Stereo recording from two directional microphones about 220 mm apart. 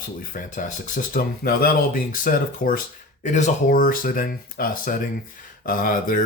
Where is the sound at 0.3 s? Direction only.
35° left (ahead or behind).